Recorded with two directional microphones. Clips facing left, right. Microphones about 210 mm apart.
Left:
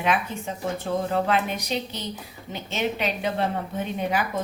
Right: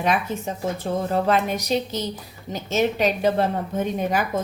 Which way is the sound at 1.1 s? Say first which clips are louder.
Right 5 dB; 40° right (ahead or behind).